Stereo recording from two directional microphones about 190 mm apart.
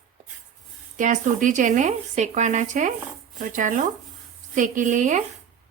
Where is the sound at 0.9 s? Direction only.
40° right (ahead or behind).